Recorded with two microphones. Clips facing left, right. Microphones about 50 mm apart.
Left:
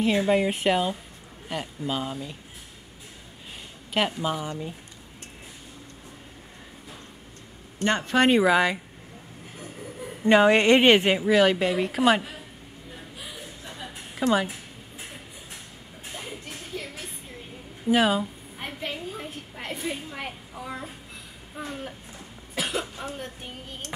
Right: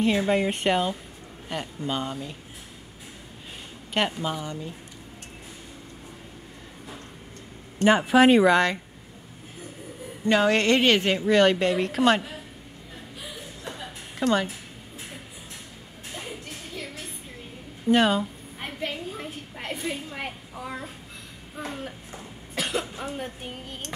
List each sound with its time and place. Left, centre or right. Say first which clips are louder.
0.0 s a woman's voice: left 1 dB; centre
3.9 s a woman's voice: left 1 dB; centre
7.8 s a woman's voice: right 4 dB; centre
10.2 s a woman's voice: left 3 dB; centre
11.2 s a woman's voice: right 4 dB; centre
13.7 s music: left 1 dB; centre
16.2 s music: right 1 dB; centre
17.8 s a sound: right 1 dB; centre
22.6 s cough: right 1 dB; centre
22.9 s a woman's voice: right 2 dB; centre